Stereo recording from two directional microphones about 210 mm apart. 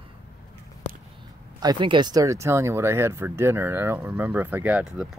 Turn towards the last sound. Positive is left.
turn(degrees=-5)  # may be behind; listen again after turning